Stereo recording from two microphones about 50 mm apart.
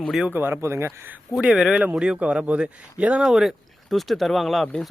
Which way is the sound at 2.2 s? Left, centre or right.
Right.